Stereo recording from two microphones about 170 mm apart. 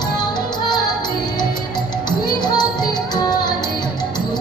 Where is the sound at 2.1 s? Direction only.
25° left (ahead or behind).